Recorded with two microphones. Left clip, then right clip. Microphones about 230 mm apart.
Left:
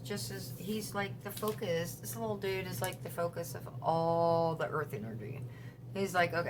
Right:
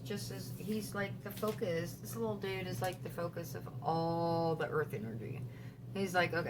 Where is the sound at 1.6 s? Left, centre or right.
Left.